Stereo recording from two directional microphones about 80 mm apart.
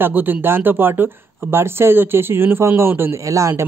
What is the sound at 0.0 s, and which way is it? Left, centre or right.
Speech, right.